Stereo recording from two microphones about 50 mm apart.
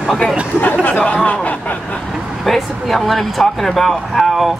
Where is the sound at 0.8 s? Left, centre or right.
Left.